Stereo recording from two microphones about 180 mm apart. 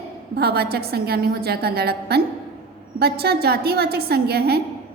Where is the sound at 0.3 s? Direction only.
60° right (ahead or behind).